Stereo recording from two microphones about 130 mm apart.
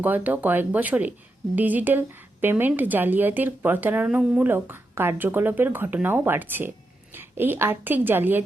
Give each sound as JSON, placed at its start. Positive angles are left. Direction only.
{"t": 0.0, "sound": "a woman's voice", "side_deg": -15}